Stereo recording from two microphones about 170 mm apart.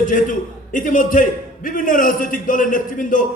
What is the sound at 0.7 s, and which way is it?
A man's voice, 50° left (ahead or behind).